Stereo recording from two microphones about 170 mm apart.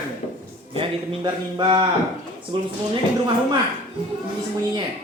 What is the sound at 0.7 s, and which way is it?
Speech, 25° right (ahead or behind).